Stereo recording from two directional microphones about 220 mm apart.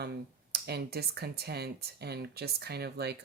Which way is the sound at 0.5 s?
45° right (ahead or behind).